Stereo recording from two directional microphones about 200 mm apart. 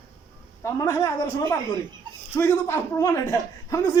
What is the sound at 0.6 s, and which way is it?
A woman's voice, 15° left (ahead or behind).